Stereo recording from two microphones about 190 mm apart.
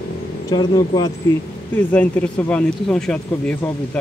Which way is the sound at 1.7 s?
10° left (ahead or behind).